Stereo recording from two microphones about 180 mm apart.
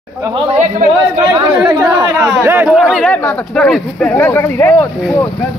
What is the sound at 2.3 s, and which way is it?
Speech, 10° right (ahead or behind).